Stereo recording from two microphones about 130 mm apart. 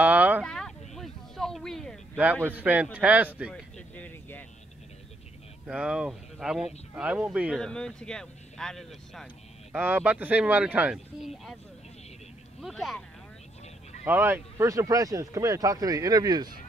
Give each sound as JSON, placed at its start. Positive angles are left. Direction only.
{"t": 0.0, "sound": "a sound", "side_deg": -10}
{"t": 0.4, "sound": "a sound", "side_deg": 5}
{"t": 2.4, "sound": "speech", "side_deg": -15}
{"t": 3.7, "sound": "a sound", "side_deg": 10}
{"t": 5.7, "sound": "speech", "side_deg": -5}
{"t": 7.5, "sound": "speech", "side_deg": 5}
{"t": 9.7, "sound": "speech", "side_deg": -15}
{"t": 12.6, "sound": "speech", "side_deg": 0}
{"t": 14.0, "sound": "speech", "side_deg": -15}